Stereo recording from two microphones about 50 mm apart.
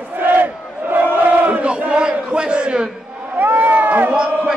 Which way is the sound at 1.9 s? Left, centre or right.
Right.